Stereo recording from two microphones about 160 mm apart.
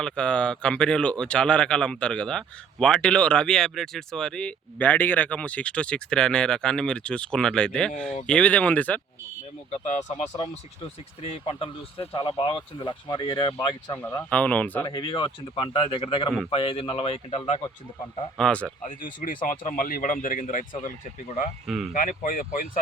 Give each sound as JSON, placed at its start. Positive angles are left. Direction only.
{"t": 0.0, "sound": "speech", "side_deg": 5}
{"t": 9.7, "sound": "speech", "side_deg": 45}
{"t": 11.2, "sound": "speech", "side_deg": 35}
{"t": 13.9, "sound": "speech", "side_deg": 15}
{"t": 14.8, "sound": "speech", "side_deg": 25}
{"t": 18.3, "sound": "speech", "side_deg": 5}
{"t": 18.9, "sound": "speech", "side_deg": 55}
{"t": 21.9, "sound": "speech", "side_deg": 60}